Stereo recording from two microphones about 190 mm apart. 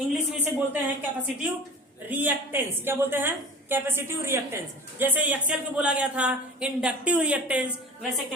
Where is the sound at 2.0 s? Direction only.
10° right (ahead or behind).